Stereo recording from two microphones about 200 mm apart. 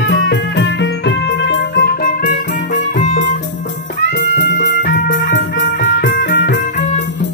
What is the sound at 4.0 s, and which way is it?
Music, 65° left (ahead or behind).